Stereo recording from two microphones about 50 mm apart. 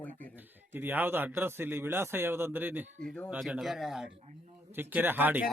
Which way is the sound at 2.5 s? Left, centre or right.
Right.